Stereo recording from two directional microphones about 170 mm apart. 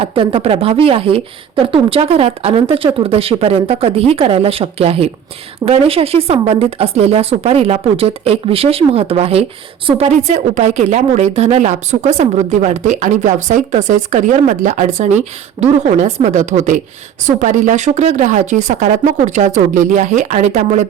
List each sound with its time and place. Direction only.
0.0 s a woman's voice: 30° right (ahead or behind)